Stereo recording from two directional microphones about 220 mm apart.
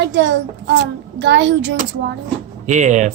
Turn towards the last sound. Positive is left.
turn(degrees=-35)  # may be behind; listen again after turning